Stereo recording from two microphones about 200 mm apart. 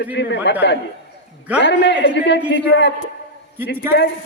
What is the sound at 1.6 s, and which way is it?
A man's voice, 60° left (ahead or behind).